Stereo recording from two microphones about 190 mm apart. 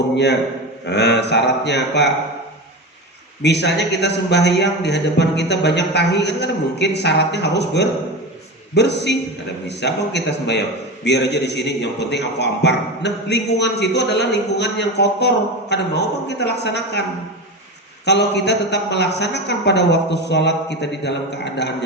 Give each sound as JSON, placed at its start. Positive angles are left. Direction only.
{"t": 0.9, "sound": "a man's voice", "side_deg": 65}
{"t": 3.4, "sound": "a man's voice", "side_deg": 65}
{"t": 18.0, "sound": "a man's voice", "side_deg": 65}